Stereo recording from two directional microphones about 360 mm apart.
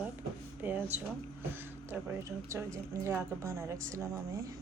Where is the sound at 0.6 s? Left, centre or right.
Centre.